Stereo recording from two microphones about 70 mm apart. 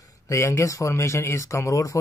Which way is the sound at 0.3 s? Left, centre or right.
Left.